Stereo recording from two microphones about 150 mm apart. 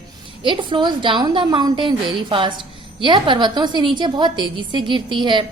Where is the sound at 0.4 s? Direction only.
35° right (ahead or behind).